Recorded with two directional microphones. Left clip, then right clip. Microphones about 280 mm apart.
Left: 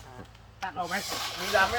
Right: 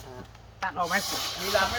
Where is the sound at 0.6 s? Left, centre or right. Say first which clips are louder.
Right 5 dB; centre.